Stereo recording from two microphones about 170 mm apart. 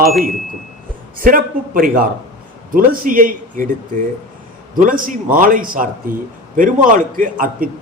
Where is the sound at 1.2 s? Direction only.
55° right (ahead or behind).